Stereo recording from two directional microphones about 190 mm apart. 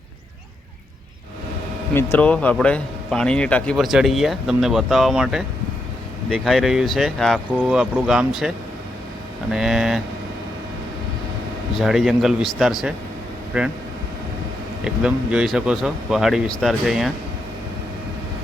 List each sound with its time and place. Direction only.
1.9 s a man's voice: 10° left (ahead or behind); by 8.3 s 5° right (ahead or behind)
9.5 s a man's voice: centre (ahead or behind)
11.8 s a man's voice: centre (ahead or behind)
14.8 s a man's voice: 5° right (ahead or behind)